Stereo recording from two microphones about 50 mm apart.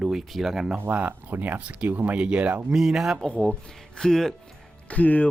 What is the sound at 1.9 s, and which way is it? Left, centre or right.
Speech, right.